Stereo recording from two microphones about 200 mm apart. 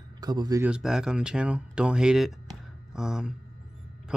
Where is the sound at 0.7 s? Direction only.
5° right (ahead or behind).